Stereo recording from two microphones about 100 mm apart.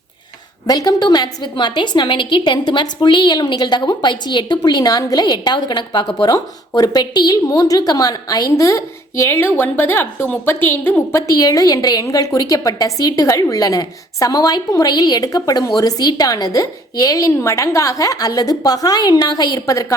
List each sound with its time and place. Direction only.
0.7 s a woman's voice: 40° left (ahead or behind); by 11.2 s 25° left (ahead or behind)
11.3 s a woman's voice: 35° left (ahead or behind)